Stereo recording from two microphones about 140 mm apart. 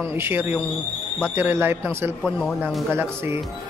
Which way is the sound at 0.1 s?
15° right (ahead or behind).